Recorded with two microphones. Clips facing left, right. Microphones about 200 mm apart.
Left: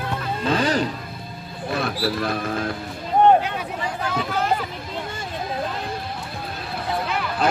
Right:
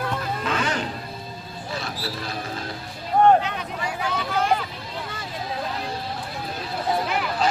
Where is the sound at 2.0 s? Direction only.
55° left (ahead or behind).